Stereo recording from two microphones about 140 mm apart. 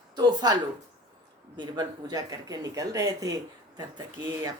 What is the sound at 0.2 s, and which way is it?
Speech, 30° right (ahead or behind).